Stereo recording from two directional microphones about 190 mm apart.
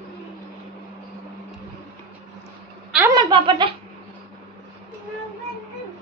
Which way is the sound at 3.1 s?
25° right (ahead or behind).